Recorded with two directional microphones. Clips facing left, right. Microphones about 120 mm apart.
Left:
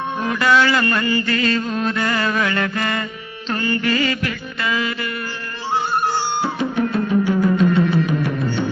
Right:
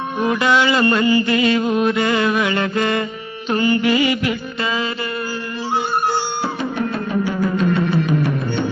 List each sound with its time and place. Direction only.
0.3 s mantra: 20° right (ahead or behind)
3.5 s music: 15° right (ahead or behind)